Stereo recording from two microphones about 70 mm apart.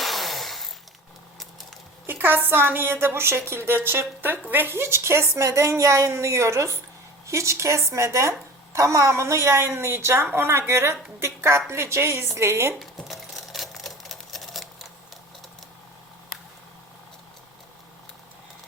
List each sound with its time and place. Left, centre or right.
0.0 s a sound: centre
2.0 s a woman's voice: right
12.8 s sewing machine: centre